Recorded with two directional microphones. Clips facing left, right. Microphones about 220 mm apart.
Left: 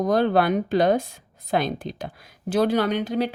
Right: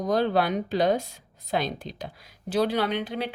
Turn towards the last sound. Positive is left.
turn(degrees=45)  # may be behind; listen again after turning